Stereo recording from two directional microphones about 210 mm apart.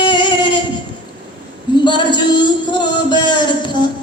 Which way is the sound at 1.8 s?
20° left (ahead or behind).